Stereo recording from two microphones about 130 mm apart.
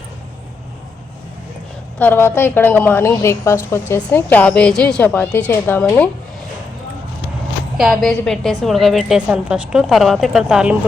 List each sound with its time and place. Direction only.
2.0 s a woman's voice: 15° left (ahead or behind)
7.8 s a woman's voice: centre (ahead or behind)